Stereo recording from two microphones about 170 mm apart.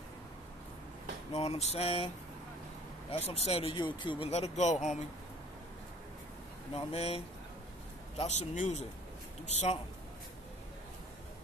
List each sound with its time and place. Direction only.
1.3 s speech: 35° left (ahead or behind)
3.1 s speech: 40° left (ahead or behind)
6.7 s speech: 35° left (ahead or behind)